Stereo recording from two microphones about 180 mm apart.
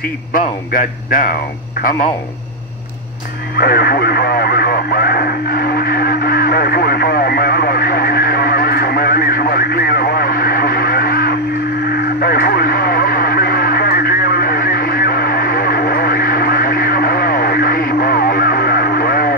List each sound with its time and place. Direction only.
0.3 s speech: 50° left (ahead or behind)
3.5 s radio: 55° left (ahead or behind)